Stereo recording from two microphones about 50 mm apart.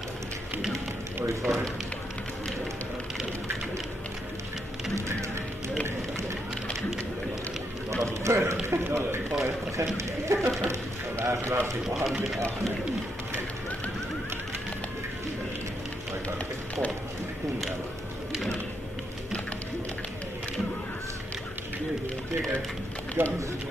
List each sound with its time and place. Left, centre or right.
1.2 s speech: right
7.9 s a sound: right
8.6 s speech: right
9.4 s speech: right
10.6 s a man's voice: right
11.9 s speech: centre
23.2 s speech: right